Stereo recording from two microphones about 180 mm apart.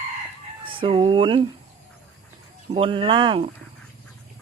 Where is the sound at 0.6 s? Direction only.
30° right (ahead or behind).